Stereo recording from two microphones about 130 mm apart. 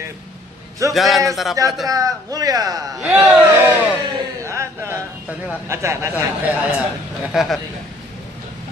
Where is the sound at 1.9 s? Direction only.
25° right (ahead or behind).